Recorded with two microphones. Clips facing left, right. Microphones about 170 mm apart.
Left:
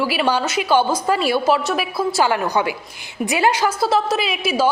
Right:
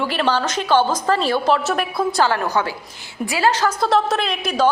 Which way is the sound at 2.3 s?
15° left (ahead or behind).